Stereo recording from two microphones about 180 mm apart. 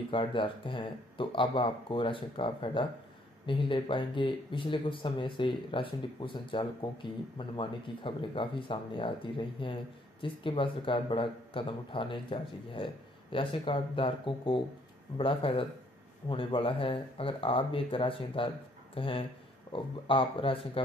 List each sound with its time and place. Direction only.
0.1 s speech: 30° left (ahead or behind)